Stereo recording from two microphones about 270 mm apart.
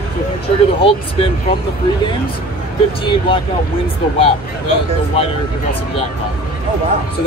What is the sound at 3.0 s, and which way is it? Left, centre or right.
Speech, centre.